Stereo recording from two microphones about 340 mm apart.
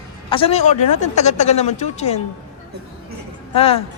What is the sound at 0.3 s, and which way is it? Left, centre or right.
Speech, centre.